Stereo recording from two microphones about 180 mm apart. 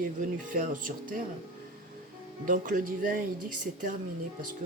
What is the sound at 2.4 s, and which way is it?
Speech, 50° right (ahead or behind).